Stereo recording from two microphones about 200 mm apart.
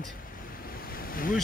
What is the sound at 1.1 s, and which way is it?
Speech, 45° left (ahead or behind).